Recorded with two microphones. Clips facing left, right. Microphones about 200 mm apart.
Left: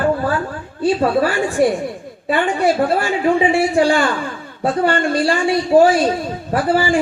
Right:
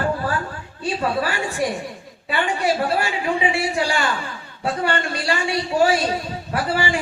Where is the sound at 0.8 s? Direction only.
35° left (ahead or behind).